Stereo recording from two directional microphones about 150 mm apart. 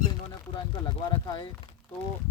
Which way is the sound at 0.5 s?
25° left (ahead or behind).